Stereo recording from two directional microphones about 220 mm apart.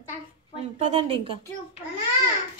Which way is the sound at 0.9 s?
25° right (ahead or behind).